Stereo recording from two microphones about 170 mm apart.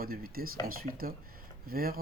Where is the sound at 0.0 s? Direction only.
60° right (ahead or behind).